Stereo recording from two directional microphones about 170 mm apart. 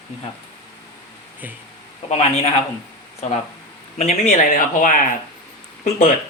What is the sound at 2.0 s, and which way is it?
Speech, 40° left (ahead or behind).